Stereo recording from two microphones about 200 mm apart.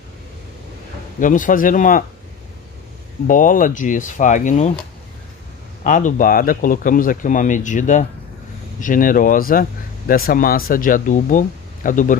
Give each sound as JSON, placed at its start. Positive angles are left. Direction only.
{"t": 1.2, "sound": "speech", "side_deg": 40}
{"t": 3.3, "sound": "speech", "side_deg": 40}
{"t": 5.9, "sound": "speech", "side_deg": 40}